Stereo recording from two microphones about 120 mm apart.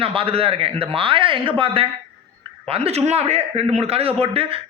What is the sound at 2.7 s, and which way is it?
A man's voice, 55° right (ahead or behind).